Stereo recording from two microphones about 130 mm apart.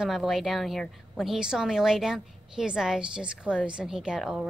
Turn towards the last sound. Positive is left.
turn(degrees=-5)  # may be behind; listen again after turning